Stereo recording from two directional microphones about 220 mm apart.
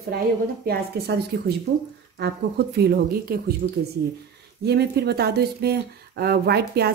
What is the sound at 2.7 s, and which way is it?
Speech, 45° right (ahead or behind).